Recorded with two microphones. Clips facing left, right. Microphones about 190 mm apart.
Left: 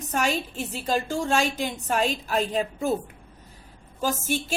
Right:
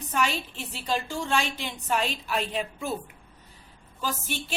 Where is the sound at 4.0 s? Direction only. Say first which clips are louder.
Left 6 dB; 45° left (ahead or behind).